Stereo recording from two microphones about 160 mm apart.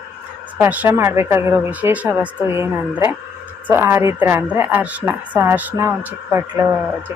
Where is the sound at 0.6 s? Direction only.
10° right (ahead or behind).